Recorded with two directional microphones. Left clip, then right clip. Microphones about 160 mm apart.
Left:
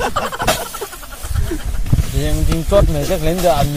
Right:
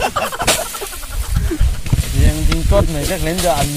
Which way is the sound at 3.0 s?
45° left (ahead or behind).